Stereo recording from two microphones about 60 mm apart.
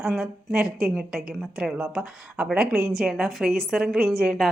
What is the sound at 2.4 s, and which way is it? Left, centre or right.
Speech, right.